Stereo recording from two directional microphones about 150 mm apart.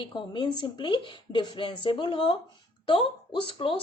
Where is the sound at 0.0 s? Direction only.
30° left (ahead or behind).